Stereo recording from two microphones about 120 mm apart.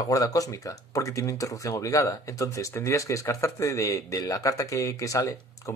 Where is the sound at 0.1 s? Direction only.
30° left (ahead or behind).